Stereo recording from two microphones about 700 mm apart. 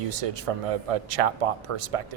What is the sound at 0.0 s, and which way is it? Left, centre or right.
Speech, right.